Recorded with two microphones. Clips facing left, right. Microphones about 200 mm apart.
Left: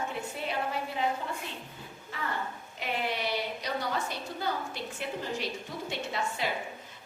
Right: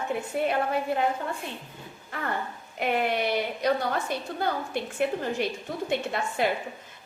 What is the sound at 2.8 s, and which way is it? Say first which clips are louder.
A woman's voice: right 7 dB; 55° right (ahead or behind).